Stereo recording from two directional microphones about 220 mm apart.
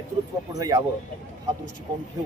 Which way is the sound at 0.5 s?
15° right (ahead or behind).